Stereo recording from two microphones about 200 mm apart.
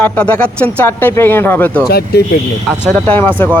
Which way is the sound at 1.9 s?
50° left (ahead or behind).